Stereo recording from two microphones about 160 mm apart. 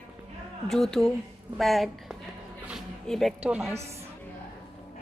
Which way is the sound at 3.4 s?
10° right (ahead or behind).